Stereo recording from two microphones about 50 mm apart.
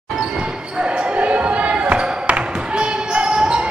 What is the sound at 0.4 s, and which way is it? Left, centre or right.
Basketball bounce, right.